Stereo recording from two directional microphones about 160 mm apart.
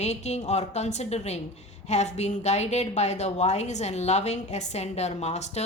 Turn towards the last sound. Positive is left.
turn(degrees=45)  # may be behind; listen again after turning